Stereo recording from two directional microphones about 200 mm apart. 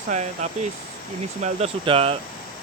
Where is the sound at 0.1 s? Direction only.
35° right (ahead or behind).